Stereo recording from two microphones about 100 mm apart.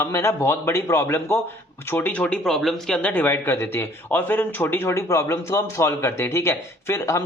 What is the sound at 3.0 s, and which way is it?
Speech, 15° left (ahead or behind).